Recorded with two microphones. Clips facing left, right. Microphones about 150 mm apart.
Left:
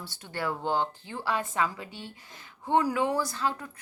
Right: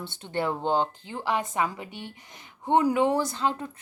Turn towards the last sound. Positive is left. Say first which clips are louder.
# right 3 dB
turn(degrees=-25)  # may be behind; listen again after turning